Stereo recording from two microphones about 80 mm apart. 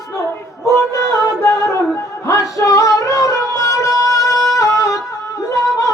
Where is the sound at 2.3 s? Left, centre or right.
Left.